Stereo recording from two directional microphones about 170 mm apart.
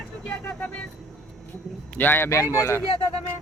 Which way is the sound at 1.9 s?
10° left (ahead or behind).